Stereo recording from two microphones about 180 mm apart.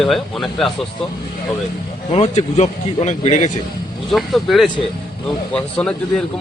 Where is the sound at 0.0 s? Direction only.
Centre (ahead or behind).